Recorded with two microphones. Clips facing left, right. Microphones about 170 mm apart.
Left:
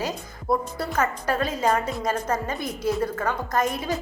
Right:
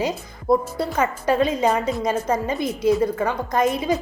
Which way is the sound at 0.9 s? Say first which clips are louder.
Right 5 dB; 10° right (ahead or behind).